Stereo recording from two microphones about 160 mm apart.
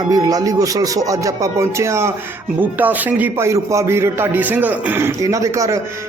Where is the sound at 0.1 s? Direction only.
25° right (ahead or behind).